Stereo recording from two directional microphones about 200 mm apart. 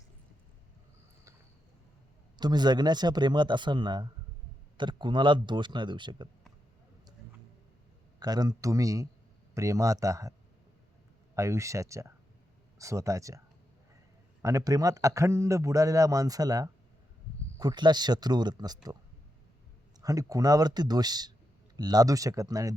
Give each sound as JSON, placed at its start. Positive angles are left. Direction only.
{"t": 2.4, "sound": "speech", "side_deg": -20}
{"t": 8.2, "sound": "a man's voice", "side_deg": -20}
{"t": 11.3, "sound": "a man's voice", "side_deg": -15}
{"t": 14.4, "sound": "a man's voice", "side_deg": -15}
{"t": 20.0, "sound": "a man's voice", "side_deg": -15}